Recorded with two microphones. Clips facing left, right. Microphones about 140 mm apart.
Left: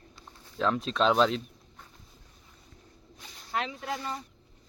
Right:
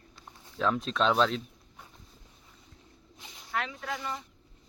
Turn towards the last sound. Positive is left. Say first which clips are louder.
# left 1 dB
turn(degrees=20)  # may be behind; listen again after turning